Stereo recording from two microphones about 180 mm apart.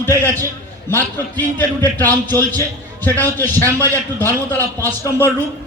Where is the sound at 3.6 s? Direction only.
15° right (ahead or behind).